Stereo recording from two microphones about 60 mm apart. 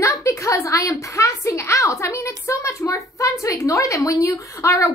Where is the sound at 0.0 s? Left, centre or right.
Left.